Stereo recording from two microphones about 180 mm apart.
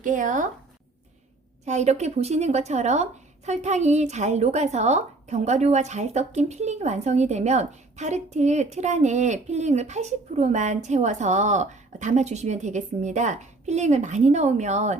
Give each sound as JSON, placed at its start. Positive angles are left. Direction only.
{"t": 0.0, "sound": "speech", "side_deg": -45}
{"t": 1.6, "sound": "a woman's voice", "side_deg": -40}